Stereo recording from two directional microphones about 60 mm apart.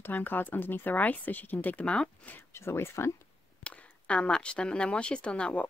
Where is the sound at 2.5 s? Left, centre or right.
Left.